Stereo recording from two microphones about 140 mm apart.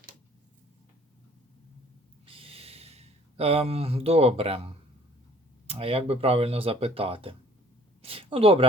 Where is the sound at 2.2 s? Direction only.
40° right (ahead or behind).